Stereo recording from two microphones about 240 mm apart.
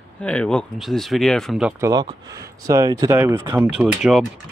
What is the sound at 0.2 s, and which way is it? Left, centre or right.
Speech, centre.